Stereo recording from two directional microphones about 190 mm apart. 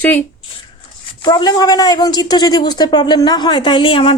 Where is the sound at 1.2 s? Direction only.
20° left (ahead or behind).